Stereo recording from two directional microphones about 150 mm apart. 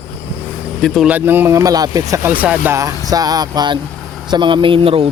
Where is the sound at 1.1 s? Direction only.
10° right (ahead or behind); by 5.1 s 40° right (ahead or behind).